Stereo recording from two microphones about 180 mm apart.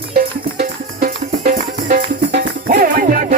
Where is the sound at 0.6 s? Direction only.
55° right (ahead or behind).